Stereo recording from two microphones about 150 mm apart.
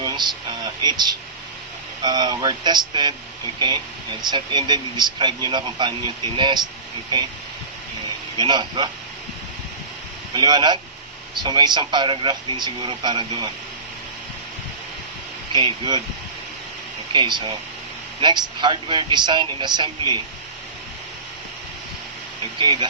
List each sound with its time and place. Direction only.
0.0 s a sound: 30° right (ahead or behind)
2.0 s speech: 30° right (ahead or behind)
4.2 s speech: 30° right (ahead or behind)
8.4 s speech: 30° right (ahead or behind)
10.3 s speech: 30° right (ahead or behind)
17.1 s speech: 30° right (ahead or behind)
22.5 s speech: 30° right (ahead or behind)